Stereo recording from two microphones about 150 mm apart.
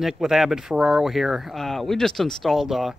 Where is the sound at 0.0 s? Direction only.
Centre (ahead or behind).